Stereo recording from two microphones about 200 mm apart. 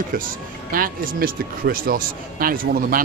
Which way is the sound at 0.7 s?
45° right (ahead or behind).